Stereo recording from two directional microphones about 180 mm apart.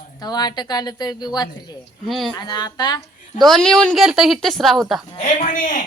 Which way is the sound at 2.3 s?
25° left (ahead or behind).